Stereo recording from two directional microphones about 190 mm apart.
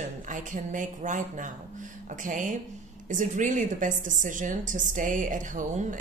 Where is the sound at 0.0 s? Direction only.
40° right (ahead or behind).